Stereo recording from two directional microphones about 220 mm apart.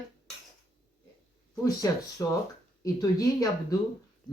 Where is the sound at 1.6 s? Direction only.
15° left (ahead or behind).